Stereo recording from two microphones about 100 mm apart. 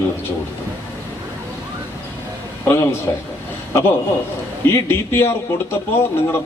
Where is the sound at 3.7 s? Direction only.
25° left (ahead or behind).